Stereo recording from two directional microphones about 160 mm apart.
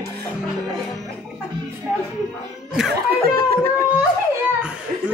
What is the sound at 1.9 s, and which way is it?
Music, 10° right (ahead or behind).